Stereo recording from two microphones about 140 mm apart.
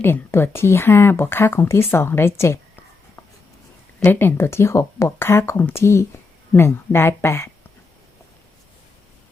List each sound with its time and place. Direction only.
0.0 s a woman's voice: 15° left (ahead or behind)
4.0 s a woman's voice: 15° left (ahead or behind)